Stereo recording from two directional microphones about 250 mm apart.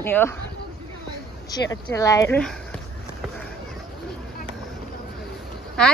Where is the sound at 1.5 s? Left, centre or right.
Centre.